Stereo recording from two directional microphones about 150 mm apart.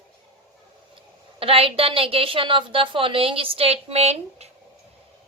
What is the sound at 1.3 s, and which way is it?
A woman's voice, 40° right (ahead or behind).